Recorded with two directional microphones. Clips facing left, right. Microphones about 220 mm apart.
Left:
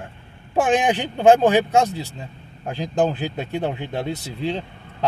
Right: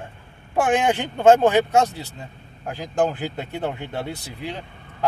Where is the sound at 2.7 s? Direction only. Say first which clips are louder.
Left 2 dB; 25° left (ahead or behind).